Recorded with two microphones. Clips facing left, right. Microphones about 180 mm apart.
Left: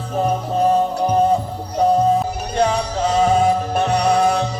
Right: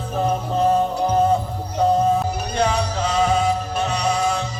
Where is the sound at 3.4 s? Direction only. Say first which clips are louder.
Left 4 dB; 55° left (ahead or behind).